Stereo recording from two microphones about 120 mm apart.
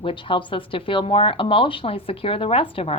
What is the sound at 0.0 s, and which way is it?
Speech, 45° left (ahead or behind).